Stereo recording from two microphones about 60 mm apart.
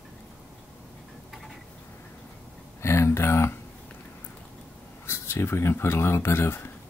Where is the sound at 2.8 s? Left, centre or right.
Left.